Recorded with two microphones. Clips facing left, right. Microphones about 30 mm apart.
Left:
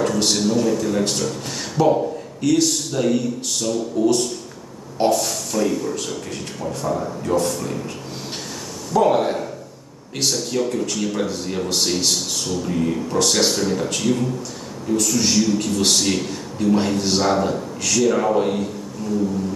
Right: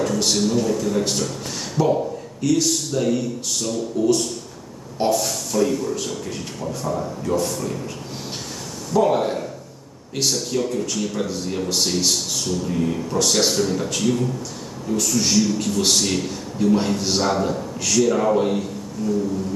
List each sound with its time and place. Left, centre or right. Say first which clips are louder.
0.0 s speech: left 1 dB; centre
8.9 s speech: left 1 dB; centre
19.0 s a sound: right 2 dB; left